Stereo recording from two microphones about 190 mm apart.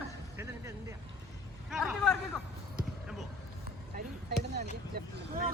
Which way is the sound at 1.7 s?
Centre (ahead or behind).